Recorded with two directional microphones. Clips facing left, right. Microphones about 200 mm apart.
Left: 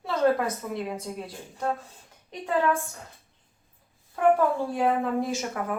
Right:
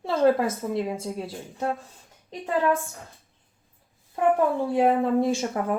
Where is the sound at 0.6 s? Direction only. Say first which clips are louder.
Right 4 dB; 30° right (ahead or behind).